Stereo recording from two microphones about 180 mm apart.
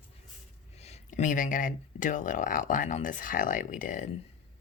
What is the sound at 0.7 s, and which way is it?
Speech, 35° left (ahead or behind).